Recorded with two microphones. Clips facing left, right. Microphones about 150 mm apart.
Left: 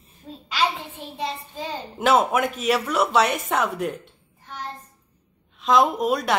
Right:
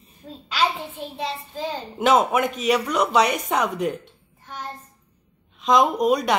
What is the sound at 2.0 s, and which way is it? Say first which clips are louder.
Speech: right 1 dB; centre (ahead or behind).